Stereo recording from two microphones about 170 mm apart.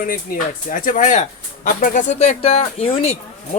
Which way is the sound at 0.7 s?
50° left (ahead or behind).